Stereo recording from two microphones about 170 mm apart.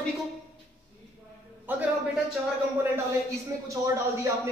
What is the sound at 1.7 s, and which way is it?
Speech, 10° right (ahead or behind).